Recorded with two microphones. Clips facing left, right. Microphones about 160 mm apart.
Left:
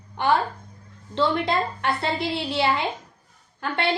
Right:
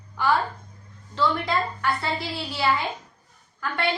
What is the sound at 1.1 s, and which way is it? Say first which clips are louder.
A woman's voice: left 2 dB; 25° left (ahead or behind).